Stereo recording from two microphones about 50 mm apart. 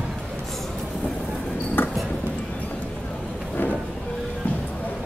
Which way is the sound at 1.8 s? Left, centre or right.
Left.